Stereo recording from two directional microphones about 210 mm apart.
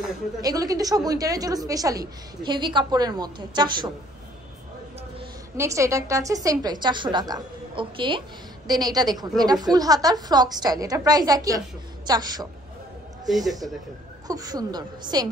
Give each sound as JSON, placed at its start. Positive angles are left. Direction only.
{"t": 0.4, "sound": "a woman's voice", "side_deg": -15}
{"t": 5.6, "sound": "a woman's voice", "side_deg": -15}
{"t": 13.3, "sound": "speech", "side_deg": 0}
{"t": 14.2, "sound": "a woman's voice", "side_deg": -20}